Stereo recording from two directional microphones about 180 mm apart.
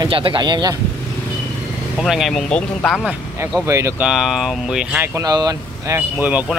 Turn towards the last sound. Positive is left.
turn(degrees=-10)  # may be behind; listen again after turning